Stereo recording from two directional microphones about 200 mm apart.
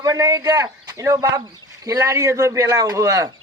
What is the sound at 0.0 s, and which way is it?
Speech, 15° right (ahead or behind).